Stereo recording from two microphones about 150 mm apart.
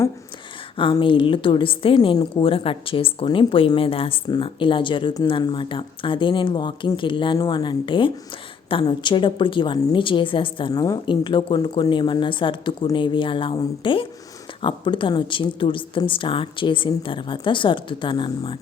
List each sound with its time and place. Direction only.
0.8 s a woman's voice: 35° left (ahead or behind)